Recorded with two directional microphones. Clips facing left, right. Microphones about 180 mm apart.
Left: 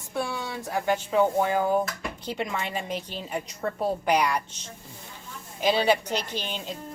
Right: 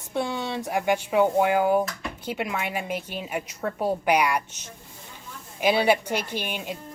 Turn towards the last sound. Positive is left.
turn(degrees=-15)  # may be behind; listen again after turning